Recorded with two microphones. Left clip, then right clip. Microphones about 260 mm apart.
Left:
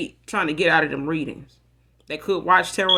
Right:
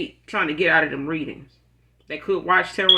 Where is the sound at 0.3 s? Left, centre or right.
Left.